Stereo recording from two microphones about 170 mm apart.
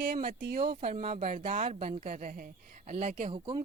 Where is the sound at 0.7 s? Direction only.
35° right (ahead or behind).